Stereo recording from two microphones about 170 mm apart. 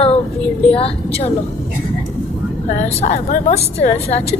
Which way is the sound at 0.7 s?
35° left (ahead or behind).